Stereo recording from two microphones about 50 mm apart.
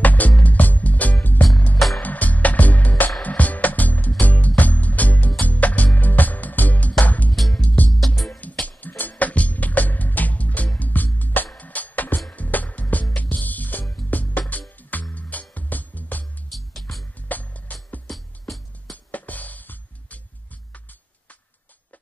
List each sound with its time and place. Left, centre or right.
0.0 s music: left
17.3 s music: left
19.1 s music: left